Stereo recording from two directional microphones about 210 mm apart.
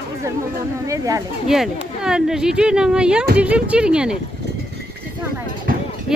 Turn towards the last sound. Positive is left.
turn(degrees=-45)  # may be behind; listen again after turning